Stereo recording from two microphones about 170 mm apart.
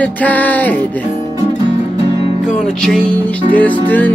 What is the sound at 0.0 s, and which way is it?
Music, 10° left (ahead or behind).